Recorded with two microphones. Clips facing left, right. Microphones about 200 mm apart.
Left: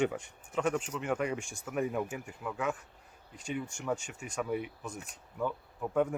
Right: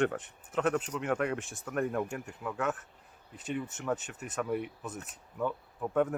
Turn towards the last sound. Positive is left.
turn(degrees=0)  # may be behind; listen again after turning